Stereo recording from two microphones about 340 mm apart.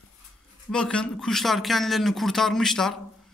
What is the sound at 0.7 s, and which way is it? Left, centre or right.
A man's voice, centre.